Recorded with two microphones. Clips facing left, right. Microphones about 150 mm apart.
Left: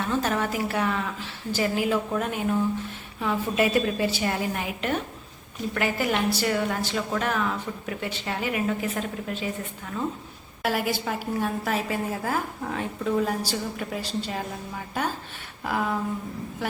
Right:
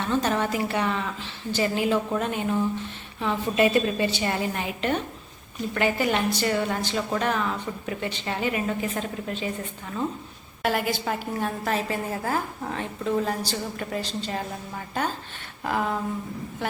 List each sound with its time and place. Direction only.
0.0 s a woman's voice: 5° left (ahead or behind)
10.6 s a woman's voice: 5° left (ahead or behind)
15.6 s a woman's voice: centre (ahead or behind)